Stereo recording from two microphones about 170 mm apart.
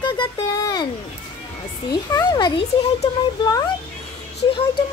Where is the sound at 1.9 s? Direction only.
20° left (ahead or behind).